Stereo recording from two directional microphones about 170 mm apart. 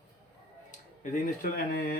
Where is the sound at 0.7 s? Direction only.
55° left (ahead or behind).